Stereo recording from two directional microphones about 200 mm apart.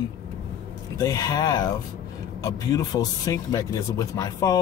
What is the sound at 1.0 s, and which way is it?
Speech, 15° left (ahead or behind).